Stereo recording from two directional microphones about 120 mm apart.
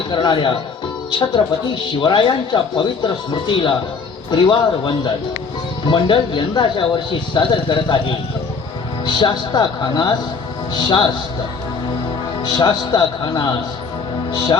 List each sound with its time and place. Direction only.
0.1 s a man's voice: 40° left (ahead or behind)
2.0 s a man's voice: 40° left (ahead or behind)
12.4 s a man's voice: 35° left (ahead or behind)